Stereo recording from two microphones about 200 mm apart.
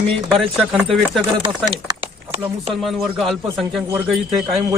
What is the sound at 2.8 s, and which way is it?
A man's voice, centre (ahead or behind).